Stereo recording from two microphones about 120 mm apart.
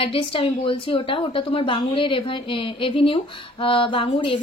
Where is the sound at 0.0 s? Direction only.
50° left (ahead or behind).